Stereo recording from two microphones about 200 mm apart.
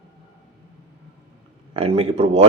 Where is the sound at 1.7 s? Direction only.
30° right (ahead or behind).